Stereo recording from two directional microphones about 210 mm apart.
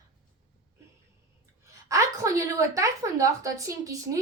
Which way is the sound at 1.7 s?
15° right (ahead or behind).